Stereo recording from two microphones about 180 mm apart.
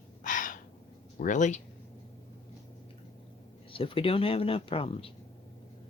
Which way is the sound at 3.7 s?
30° left (ahead or behind).